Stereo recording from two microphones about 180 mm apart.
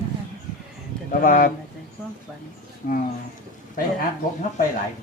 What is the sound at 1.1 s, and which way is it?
Speech, 50° left (ahead or behind).